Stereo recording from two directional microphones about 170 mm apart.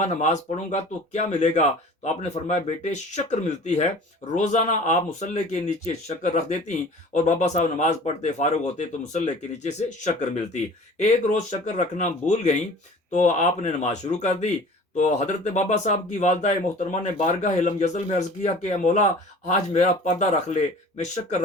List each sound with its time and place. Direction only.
0.0 s speech: 45° left (ahead or behind)